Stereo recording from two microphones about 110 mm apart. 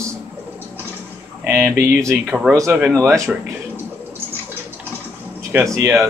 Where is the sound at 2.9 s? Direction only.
25° right (ahead or behind).